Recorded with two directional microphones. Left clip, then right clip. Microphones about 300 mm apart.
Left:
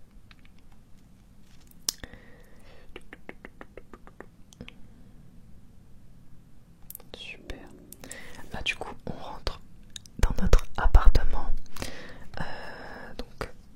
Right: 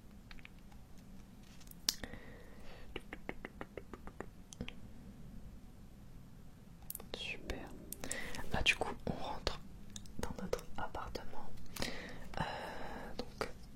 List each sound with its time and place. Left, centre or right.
1.9 s whispering: centre
7.0 s whispering: centre
10.2 s whispering: left
11.7 s whispering: centre